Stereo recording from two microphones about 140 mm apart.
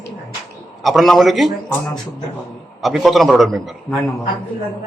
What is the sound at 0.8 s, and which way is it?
Speech, centre (ahead or behind).